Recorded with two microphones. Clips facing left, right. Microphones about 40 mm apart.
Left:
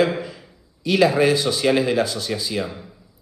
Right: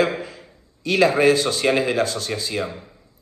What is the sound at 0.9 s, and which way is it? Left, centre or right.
Speech, right.